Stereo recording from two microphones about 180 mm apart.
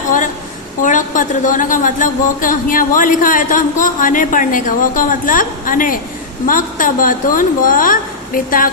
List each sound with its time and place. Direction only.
0.8 s a woman's voice: 45° left (ahead or behind)